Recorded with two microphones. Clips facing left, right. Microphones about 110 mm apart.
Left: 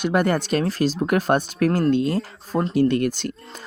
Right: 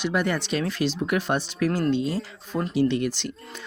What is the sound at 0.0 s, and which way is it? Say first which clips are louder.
Speech: left 5 dB; 50° left (ahead or behind).